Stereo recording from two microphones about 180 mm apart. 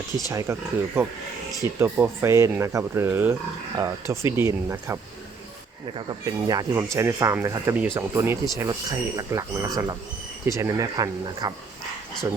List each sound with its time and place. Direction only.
0.3 s speech: 15° right (ahead or behind)
6.1 s speech: 20° right (ahead or behind)